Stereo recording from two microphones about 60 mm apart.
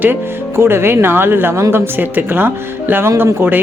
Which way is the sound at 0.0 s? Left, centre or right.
Right.